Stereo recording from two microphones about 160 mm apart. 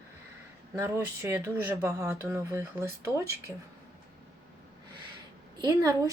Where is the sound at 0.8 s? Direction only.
15° right (ahead or behind).